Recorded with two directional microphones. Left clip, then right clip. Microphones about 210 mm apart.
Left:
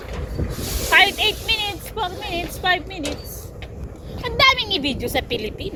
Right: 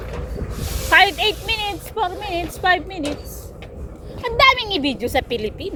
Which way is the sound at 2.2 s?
35° right (ahead or behind).